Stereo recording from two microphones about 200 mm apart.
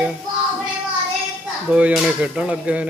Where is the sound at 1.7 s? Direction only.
5° right (ahead or behind).